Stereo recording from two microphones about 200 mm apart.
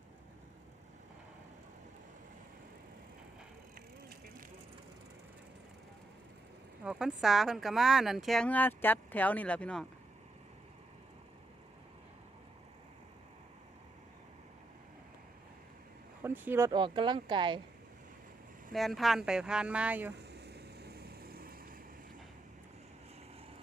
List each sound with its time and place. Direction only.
6.8 s speech: centre (ahead or behind)
16.2 s speech: 10° right (ahead or behind)
18.7 s speech: centre (ahead or behind)
20.1 s vehicle: 55° right (ahead or behind)